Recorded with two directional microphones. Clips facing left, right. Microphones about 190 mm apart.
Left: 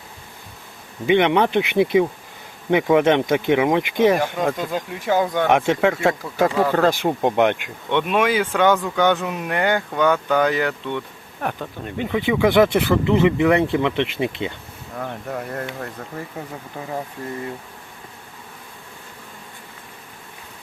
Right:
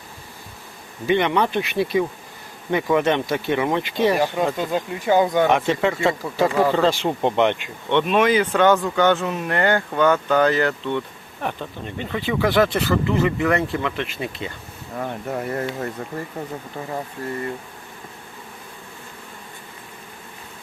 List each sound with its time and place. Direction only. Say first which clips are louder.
1.0 s speech: left 3 dB; 20° left (ahead or behind)
4.5 s speech: right 2 dB; centre (ahead or behind)
5.5 s speech: left 2 dB; 15° left (ahead or behind)
5.9 s speech: left 1 dB; centre (ahead or behind); by 14.5 s 20° left (ahead or behind)
14.9 s speech: right 2 dB; 10° right (ahead or behind)